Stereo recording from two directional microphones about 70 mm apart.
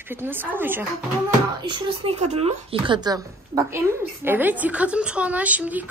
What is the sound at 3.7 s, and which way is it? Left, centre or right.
A woman's voice, right.